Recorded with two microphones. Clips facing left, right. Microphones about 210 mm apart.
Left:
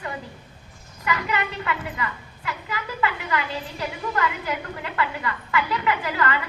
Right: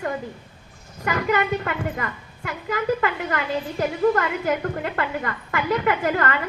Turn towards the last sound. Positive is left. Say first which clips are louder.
# right 3 dB
turn(degrees=-50)  # may be behind; listen again after turning